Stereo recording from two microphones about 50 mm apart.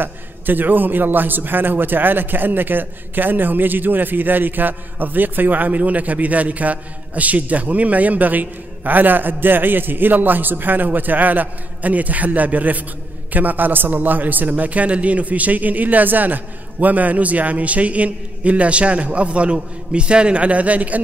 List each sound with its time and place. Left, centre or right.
0.0 s a man's voice: right